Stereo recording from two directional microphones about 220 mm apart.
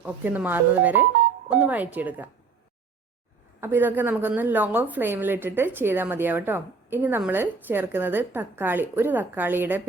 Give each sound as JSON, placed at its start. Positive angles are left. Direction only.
{"t": 0.0, "sound": "a woman's voice", "side_deg": -5}
{"t": 3.6, "sound": "a woman's voice", "side_deg": -10}